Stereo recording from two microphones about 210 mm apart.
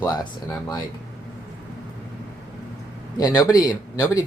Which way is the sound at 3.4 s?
20° left (ahead or behind).